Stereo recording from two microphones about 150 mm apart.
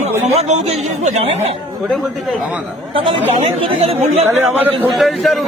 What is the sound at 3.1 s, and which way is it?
Speech, 40° right (ahead or behind).